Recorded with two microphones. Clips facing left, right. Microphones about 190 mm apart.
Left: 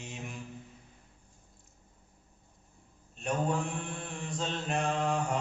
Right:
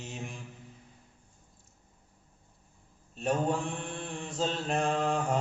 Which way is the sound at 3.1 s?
35° right (ahead or behind).